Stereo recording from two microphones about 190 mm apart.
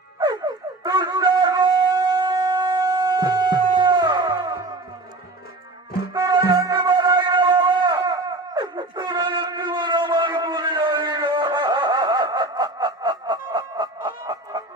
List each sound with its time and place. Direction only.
0.2 s wind instrument: 20° right (ahead or behind)
6.1 s music: 20° right (ahead or behind)